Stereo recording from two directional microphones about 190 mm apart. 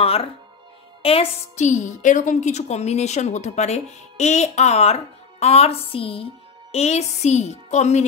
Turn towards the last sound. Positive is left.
turn(degrees=35)  # may be behind; listen again after turning